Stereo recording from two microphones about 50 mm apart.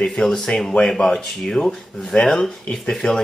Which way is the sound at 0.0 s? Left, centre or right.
Centre.